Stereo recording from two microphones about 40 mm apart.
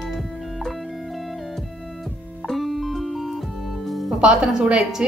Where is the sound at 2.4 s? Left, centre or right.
Centre.